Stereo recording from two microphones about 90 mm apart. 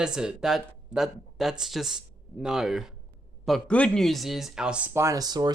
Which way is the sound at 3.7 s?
15° left (ahead or behind).